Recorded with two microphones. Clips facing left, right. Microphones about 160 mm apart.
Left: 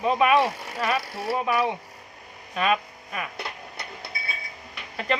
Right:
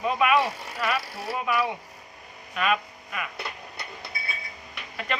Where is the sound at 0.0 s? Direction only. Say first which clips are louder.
Left 3 dB; 30° left (ahead or behind).